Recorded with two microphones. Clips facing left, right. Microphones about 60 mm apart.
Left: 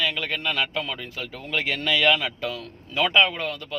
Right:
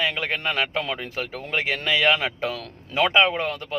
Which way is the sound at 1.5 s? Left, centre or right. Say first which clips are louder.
Right 1 dB; right.